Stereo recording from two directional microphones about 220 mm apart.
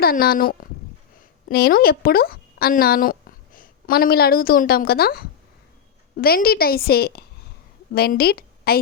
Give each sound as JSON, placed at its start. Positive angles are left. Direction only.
{"t": 0.0, "sound": "a woman's voice", "side_deg": 45}